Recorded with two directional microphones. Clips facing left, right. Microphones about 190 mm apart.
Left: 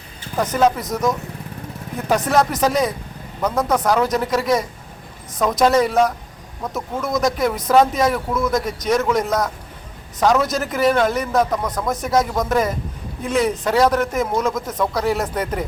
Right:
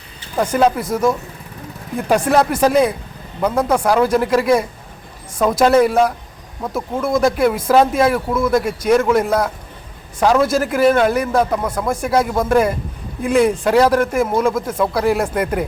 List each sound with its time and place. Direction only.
0.3 s a man's voice: 10° right (ahead or behind)
7.3 s a man's voice: 10° right (ahead or behind)